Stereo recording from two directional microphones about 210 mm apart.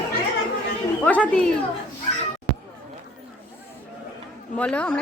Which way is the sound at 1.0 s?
5° left (ahead or behind).